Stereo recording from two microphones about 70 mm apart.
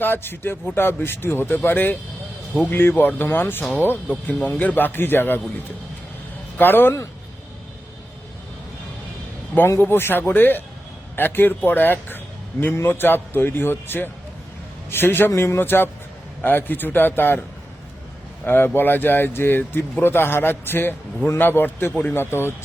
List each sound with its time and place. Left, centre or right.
0.0 s speech: left
6.6 s speech: left
9.6 s a man's voice: left
18.4 s speech: left